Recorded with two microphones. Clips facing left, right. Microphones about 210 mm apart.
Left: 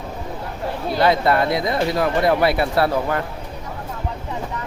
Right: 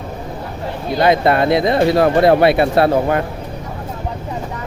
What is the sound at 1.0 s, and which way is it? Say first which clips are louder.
Speech: right 4 dB; 20° right (ahead or behind).